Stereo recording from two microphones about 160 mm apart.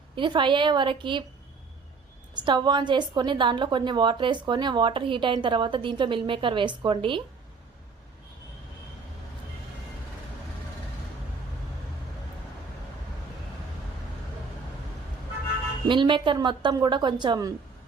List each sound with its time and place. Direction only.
0.2 s a woman's voice: 30° right (ahead or behind)
2.3 s a woman's voice: 30° right (ahead or behind)
15.9 s a woman's voice: 30° right (ahead or behind)